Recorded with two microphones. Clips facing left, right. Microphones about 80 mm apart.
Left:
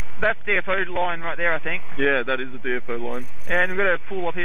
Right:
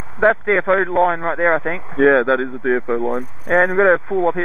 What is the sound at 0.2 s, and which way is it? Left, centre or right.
A man's voice, right.